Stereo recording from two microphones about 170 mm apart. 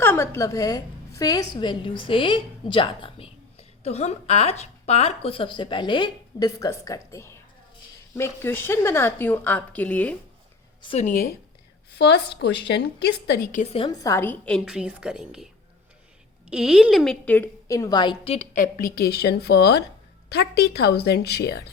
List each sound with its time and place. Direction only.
0.0 s a woman's voice: 15° left (ahead or behind)
10.8 s speech: 40° left (ahead or behind)
11.1 s speech: 60° left (ahead or behind)
11.9 s a woman's voice: 80° left
14.0 s a woman's voice: 15° left (ahead or behind); by 15.4 s 5° right (ahead or behind)
16.5 s a woman's voice: 5° right (ahead or behind); by 18.3 s 30° left (ahead or behind)
18.3 s a woman's voice: 50° left (ahead or behind); by 21.6 s 70° left (ahead or behind)